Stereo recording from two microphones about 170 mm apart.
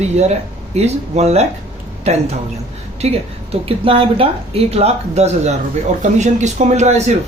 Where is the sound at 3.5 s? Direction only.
35° right (ahead or behind).